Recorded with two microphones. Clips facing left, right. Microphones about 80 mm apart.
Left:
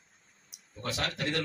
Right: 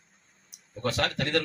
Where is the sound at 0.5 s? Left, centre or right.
Right.